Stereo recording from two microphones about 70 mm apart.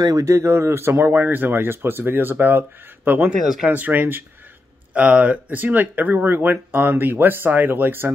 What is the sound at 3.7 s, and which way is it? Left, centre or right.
Speech, right.